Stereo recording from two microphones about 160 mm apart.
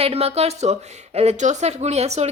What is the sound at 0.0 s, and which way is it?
A woman's voice, 40° right (ahead or behind).